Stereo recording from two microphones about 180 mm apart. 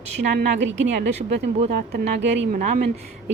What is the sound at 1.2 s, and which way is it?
Speech, 65° right (ahead or behind).